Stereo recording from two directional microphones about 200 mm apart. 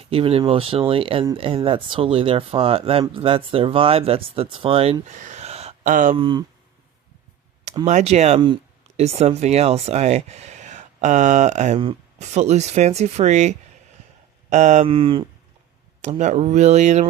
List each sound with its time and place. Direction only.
0.0 s speech: 30° right (ahead or behind)
5.2 s a sound: 35° right (ahead or behind)
6.1 s speech: 25° right (ahead or behind)
7.9 s speech: 35° right (ahead or behind)
16.0 s speech: 35° right (ahead or behind)